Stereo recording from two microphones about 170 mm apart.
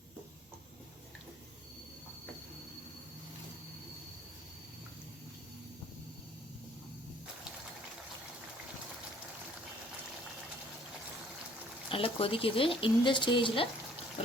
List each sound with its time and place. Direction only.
11.9 s speech: 30° left (ahead or behind)